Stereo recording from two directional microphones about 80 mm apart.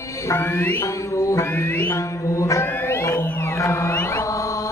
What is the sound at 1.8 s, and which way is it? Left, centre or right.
Mantra, left.